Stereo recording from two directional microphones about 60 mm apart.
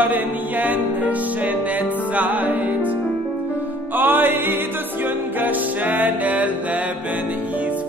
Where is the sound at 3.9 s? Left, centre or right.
Right.